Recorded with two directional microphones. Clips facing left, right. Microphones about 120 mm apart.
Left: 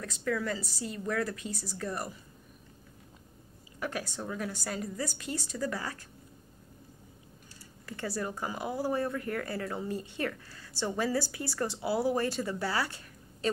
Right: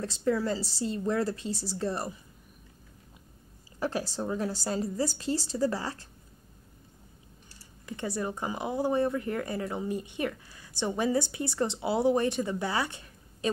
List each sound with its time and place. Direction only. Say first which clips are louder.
0.0 s speech: right 4 dB; 30° right (ahead or behind)
3.8 s a woman's voice: right 5 dB; 30° right (ahead or behind)
7.8 s speech: right 2 dB; 20° right (ahead or behind)